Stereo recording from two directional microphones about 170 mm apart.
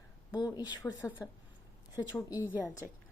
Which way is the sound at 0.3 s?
25° left (ahead or behind).